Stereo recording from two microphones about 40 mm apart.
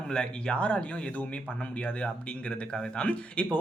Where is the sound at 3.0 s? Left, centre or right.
Left.